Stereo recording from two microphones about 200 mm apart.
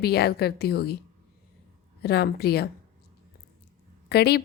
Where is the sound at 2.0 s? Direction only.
55° left (ahead or behind).